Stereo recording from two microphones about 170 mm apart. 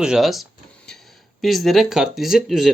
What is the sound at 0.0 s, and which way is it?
Speech, centre (ahead or behind).